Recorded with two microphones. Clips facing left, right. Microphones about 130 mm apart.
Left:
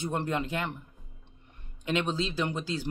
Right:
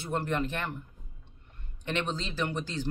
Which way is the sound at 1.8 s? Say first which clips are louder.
Left 3 dB; 10° left (ahead or behind).